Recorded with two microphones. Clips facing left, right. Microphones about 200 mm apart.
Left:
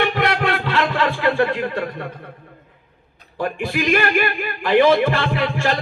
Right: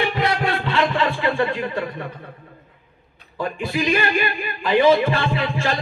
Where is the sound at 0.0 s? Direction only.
55° left (ahead or behind).